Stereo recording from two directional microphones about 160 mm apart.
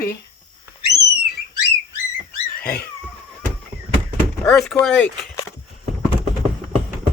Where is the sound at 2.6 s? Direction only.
70° left (ahead or behind).